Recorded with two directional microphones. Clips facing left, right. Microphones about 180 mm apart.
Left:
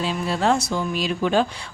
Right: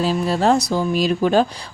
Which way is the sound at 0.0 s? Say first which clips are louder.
Right 4 dB; 40° right (ahead or behind).